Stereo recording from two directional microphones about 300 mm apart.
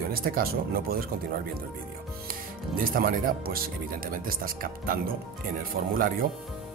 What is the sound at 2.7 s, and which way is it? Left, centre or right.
Speech, right.